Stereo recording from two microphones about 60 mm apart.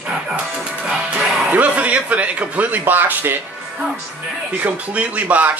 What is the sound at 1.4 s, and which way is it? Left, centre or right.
A man's voice, right.